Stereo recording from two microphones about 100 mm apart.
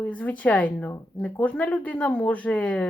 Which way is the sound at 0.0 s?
15° left (ahead or behind).